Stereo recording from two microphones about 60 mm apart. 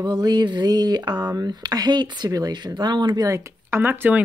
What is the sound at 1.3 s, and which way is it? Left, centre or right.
Speech, right.